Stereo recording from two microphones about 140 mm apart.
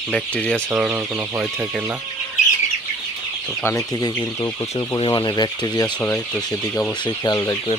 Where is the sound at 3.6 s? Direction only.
20° left (ahead or behind).